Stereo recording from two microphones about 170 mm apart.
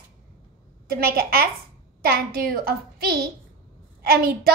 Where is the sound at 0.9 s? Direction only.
65° right (ahead or behind).